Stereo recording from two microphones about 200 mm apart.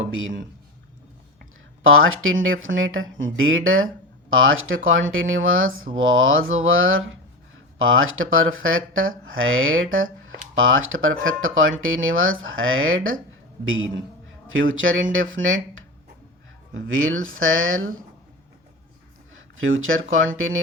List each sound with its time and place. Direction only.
0.0 s speech: 80° right
1.8 s speech: 90° right
16.9 s speech: 90° right
19.3 s speech: 90° right